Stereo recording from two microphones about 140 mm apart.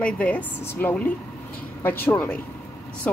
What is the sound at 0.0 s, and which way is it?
Speech, 10° left (ahead or behind).